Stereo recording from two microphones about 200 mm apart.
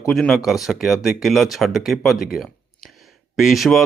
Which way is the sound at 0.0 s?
Centre (ahead or behind).